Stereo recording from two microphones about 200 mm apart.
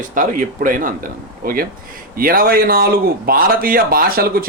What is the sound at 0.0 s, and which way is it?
Speech, 40° right (ahead or behind).